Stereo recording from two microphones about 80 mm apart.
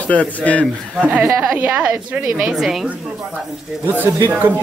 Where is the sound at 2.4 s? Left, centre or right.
Centre.